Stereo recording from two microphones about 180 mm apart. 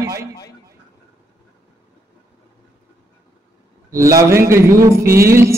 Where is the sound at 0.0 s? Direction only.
15° right (ahead or behind).